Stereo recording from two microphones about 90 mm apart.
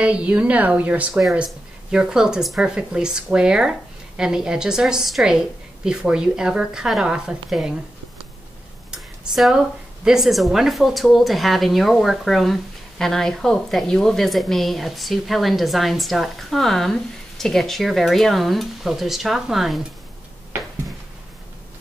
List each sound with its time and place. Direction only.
0.0 s a woman's voice: 15° right (ahead or behind)
8.9 s a sound: 5° right (ahead or behind)
10.0 s a woman's voice: 5° right (ahead or behind)